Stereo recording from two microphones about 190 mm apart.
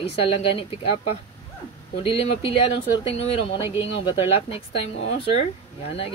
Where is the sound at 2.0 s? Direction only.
30° left (ahead or behind).